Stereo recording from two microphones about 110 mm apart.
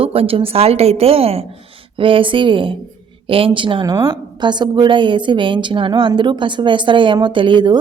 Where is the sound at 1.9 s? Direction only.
55° right (ahead or behind).